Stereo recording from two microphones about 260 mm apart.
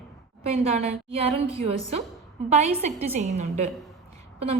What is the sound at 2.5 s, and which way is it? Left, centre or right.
A woman's voice, right.